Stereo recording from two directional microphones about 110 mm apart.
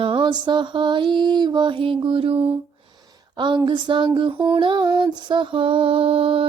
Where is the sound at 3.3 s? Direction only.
40° right (ahead or behind).